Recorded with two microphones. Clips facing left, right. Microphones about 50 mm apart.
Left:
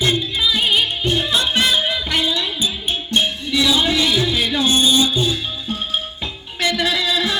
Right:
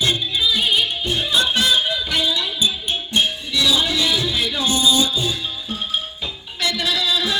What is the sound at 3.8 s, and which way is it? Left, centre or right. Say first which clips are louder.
Music: left 3 dB; left.